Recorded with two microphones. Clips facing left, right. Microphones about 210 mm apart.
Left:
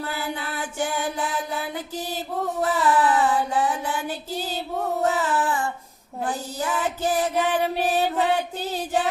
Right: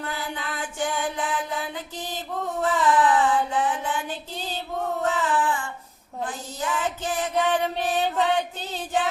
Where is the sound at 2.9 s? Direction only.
40° left (ahead or behind).